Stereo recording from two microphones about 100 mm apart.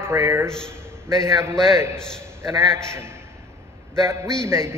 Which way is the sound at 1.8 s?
25° right (ahead or behind).